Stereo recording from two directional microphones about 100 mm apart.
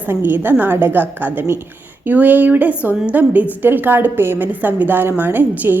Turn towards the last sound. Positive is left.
turn(degrees=-20)  # may be behind; listen again after turning